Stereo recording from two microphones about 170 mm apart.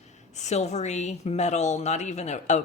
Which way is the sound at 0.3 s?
40° left (ahead or behind).